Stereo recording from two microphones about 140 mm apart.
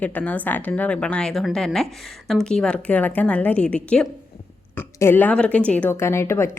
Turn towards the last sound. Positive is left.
turn(degrees=20)  # may be behind; listen again after turning